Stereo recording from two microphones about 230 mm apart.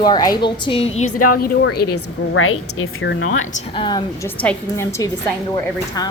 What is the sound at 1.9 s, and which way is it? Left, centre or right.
A woman's voice, left.